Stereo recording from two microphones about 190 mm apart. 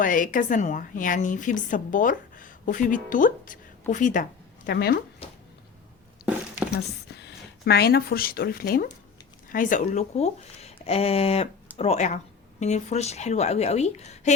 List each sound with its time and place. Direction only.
0.0 s a woman's voice: 45° left (ahead or behind)
6.7 s speech: 60° left (ahead or behind); by 14.3 s 35° left (ahead or behind)